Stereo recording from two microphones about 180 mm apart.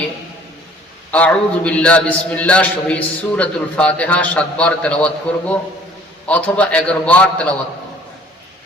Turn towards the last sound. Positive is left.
turn(degrees=10)  # may be behind; listen again after turning